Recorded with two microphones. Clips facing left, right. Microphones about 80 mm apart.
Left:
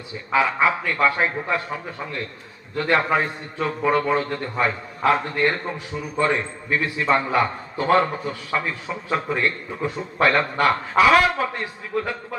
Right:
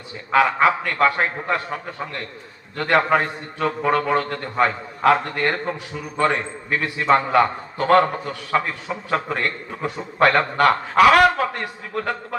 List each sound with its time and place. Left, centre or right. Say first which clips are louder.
0.3 s a man's voice: right 3 dB; right